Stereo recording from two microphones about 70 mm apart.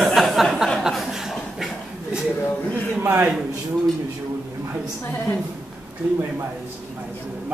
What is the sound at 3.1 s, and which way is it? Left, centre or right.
Speech, centre.